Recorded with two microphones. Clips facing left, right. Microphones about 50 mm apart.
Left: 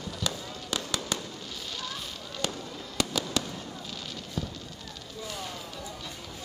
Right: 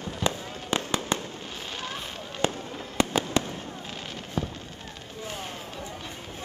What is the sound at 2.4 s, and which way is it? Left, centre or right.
Fireworks, right.